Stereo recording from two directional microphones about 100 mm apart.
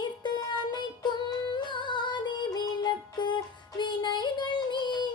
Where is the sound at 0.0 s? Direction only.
45° left (ahead or behind).